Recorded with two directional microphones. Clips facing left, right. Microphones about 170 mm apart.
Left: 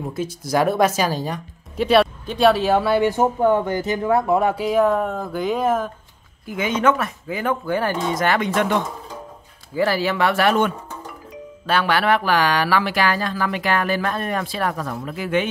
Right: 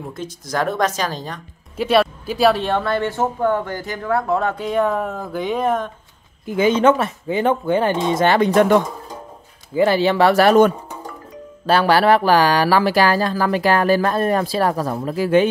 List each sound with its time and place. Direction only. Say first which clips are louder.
0.1 s speech: left 5 dB; 10° left (ahead or behind)
1.8 s speech: even; centre (ahead or behind)
6.4 s speech: right 5 dB; 30° right (ahead or behind)
8.5 s speech: right 6 dB; 45° right (ahead or behind)
9.8 s speech: right 5 dB; 25° right (ahead or behind)